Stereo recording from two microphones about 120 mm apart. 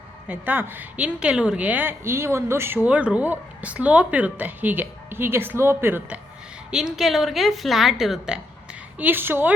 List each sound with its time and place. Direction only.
0.3 s a woman's voice: 15° right (ahead or behind)
6.7 s a woman's voice: 5° right (ahead or behind)
9.0 s a woman's voice: 15° right (ahead or behind)